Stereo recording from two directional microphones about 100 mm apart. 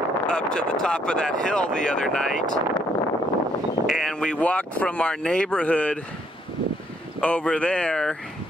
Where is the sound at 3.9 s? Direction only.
5° left (ahead or behind).